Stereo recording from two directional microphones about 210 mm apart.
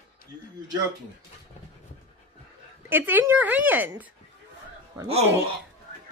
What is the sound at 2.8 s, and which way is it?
A woman's voice, 10° right (ahead or behind).